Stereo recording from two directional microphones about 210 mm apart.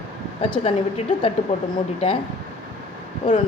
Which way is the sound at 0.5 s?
25° left (ahead or behind).